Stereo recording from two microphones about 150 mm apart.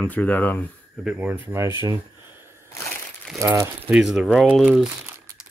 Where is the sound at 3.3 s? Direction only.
20° right (ahead or behind).